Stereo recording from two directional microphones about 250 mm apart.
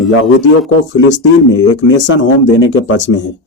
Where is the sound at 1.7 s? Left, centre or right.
Left.